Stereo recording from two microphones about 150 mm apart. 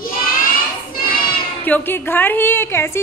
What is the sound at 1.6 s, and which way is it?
A woman's voice, 15° left (ahead or behind).